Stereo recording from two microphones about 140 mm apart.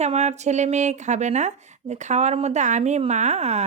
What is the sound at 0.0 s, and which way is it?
Speech, 55° right (ahead or behind).